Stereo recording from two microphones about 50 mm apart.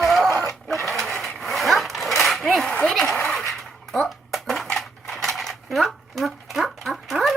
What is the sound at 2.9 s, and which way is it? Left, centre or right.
Speech, centre.